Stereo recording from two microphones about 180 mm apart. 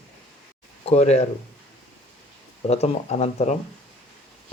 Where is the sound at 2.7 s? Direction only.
35° left (ahead or behind).